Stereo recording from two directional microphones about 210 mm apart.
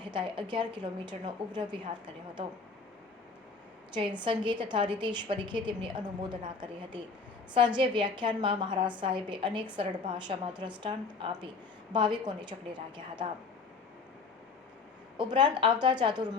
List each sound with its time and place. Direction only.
0.0 s a woman's voice: 25° right (ahead or behind)
3.9 s a woman's voice: 20° right (ahead or behind)
15.2 s a woman's voice: 20° right (ahead or behind)